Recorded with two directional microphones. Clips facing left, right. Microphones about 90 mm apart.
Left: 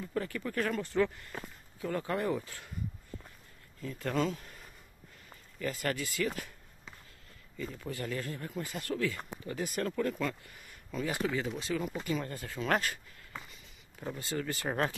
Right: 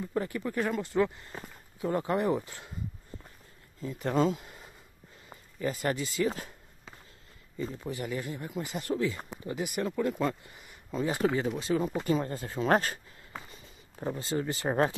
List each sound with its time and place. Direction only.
0.0 s speech: 20° right (ahead or behind)
3.8 s speech: 20° right (ahead or behind)
4.4 s a sound: 20° right (ahead or behind)
5.3 s speech: 20° right (ahead or behind)
7.5 s speech: 25° right (ahead or behind)